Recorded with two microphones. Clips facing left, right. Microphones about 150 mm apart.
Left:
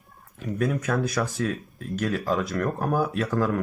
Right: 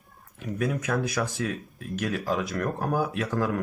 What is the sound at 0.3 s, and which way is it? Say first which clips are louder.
Speech: left 2 dB; 15° right (ahead or behind).